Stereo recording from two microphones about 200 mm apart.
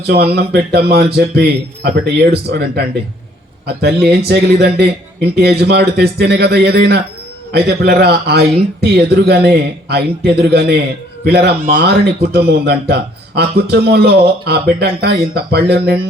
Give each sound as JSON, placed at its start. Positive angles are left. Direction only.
{"t": 0.1, "sound": "speech", "side_deg": -55}